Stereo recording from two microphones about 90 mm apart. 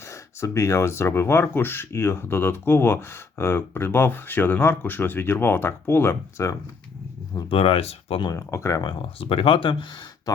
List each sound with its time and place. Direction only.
0.1 s speech: 30° left (ahead or behind)
7.5 s speech: 90° left
8.3 s speech: 30° left (ahead or behind)
8.8 s speech: 55° left (ahead or behind)
9.3 s speech: 90° left